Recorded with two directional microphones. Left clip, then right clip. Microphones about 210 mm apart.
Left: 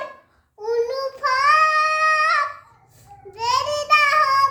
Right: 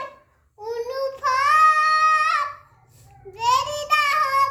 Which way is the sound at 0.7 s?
15° left (ahead or behind).